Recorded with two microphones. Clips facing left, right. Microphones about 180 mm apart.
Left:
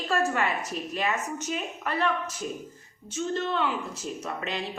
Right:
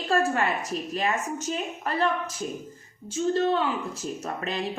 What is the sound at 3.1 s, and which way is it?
A woman's voice, 35° right (ahead or behind).